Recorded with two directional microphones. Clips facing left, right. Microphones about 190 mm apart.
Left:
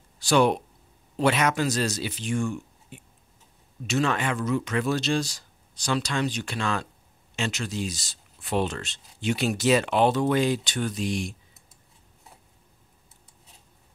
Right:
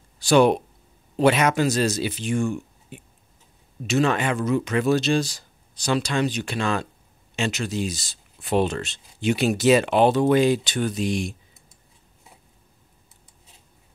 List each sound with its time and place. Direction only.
0.3 s speech: 20° right (ahead or behind)
4.0 s speech: 20° right (ahead or behind)
5.0 s speech: 5° right (ahead or behind)